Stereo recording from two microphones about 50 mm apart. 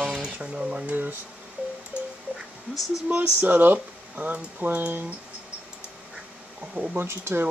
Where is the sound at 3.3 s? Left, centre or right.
Right.